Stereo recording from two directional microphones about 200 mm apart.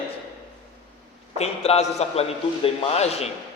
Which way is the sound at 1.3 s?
30° left (ahead or behind).